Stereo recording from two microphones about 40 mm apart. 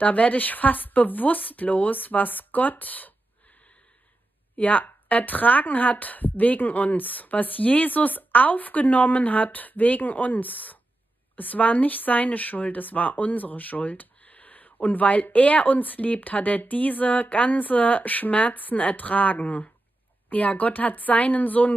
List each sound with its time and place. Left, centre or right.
0.0 s a woman's voice: left
4.6 s a woman's voice: left